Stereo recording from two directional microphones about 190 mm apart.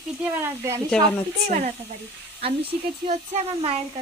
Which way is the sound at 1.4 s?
35° right (ahead or behind).